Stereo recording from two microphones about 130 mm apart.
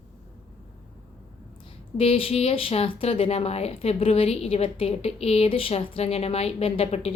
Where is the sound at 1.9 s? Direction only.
50° left (ahead or behind).